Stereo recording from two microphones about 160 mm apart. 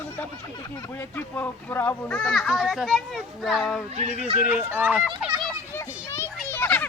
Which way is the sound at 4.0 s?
45° right (ahead or behind).